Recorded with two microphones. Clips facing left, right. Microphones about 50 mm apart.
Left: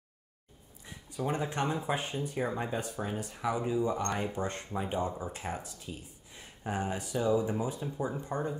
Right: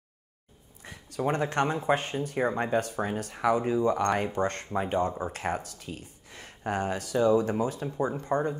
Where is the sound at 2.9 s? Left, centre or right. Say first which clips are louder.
Right 5 dB; right.